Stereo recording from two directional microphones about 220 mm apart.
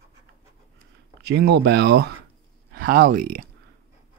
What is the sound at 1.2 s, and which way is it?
Speech, 50° right (ahead or behind).